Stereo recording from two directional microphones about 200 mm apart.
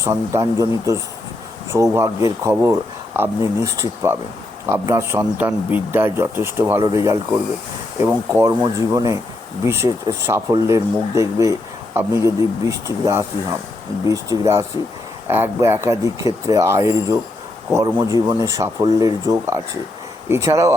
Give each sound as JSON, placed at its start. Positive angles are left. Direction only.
{"t": 0.0, "sound": "speech", "side_deg": -15}